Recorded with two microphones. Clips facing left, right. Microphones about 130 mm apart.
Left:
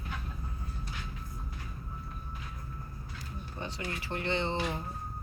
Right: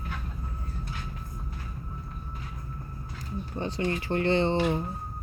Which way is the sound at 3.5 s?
30° right (ahead or behind).